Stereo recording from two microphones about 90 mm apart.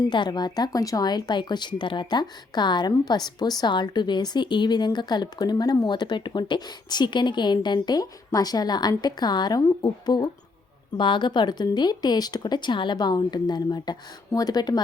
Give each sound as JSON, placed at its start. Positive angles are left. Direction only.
{"t": 0.1, "sound": "speech", "side_deg": 55}
{"t": 10.9, "sound": "speech", "side_deg": 60}